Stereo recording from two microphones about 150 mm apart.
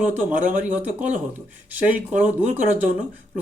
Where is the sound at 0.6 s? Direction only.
10° right (ahead or behind).